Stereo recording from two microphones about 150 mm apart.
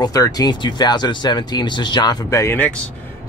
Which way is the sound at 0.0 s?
25° left (ahead or behind).